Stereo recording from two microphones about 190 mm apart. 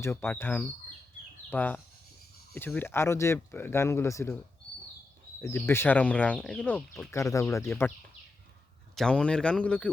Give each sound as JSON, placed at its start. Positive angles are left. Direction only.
{"t": 0.0, "sound": "speech", "side_deg": 10}
{"t": 5.4, "sound": "speech", "side_deg": 10}
{"t": 9.0, "sound": "speech", "side_deg": 5}